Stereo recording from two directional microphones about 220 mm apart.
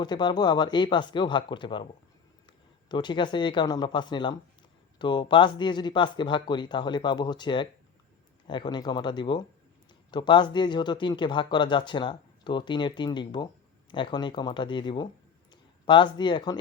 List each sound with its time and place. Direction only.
0.0 s speech: 20° left (ahead or behind)
2.9 s speech: 20° left (ahead or behind)